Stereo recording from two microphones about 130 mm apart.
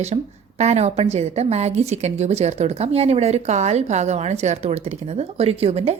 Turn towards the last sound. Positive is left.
turn(degrees=-50)  # may be behind; listen again after turning